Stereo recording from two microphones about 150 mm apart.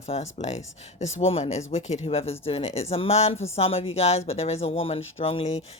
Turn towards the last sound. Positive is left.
turn(degrees=45)  # may be behind; listen again after turning